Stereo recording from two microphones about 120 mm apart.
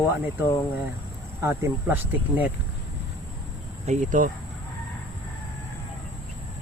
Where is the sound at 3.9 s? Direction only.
70° right (ahead or behind).